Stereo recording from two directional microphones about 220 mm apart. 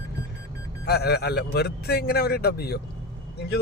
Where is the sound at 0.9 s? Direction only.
45° left (ahead or behind).